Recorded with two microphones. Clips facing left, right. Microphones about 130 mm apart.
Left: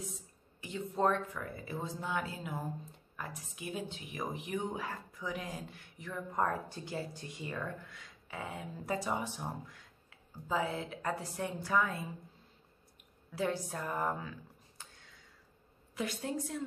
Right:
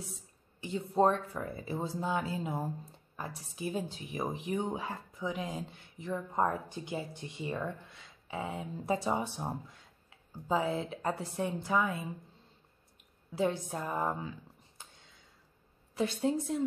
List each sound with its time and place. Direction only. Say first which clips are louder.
0.6 s speech: right 5 dB; 30° right (ahead or behind)
13.3 s speech: right 3 dB; 20° right (ahead or behind)
14.8 s a sound: right 1 dB; 20° right (ahead or behind)
15.9 s speech: right 6 dB; 30° right (ahead or behind)